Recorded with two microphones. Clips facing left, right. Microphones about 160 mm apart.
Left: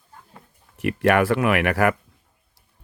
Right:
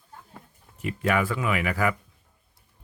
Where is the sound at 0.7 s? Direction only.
75° left (ahead or behind).